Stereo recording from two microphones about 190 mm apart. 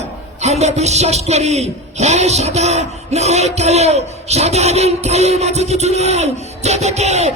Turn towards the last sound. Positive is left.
turn(degrees=-35)  # may be behind; listen again after turning